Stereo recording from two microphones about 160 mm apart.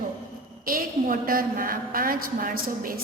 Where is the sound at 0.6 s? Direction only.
65° right (ahead or behind).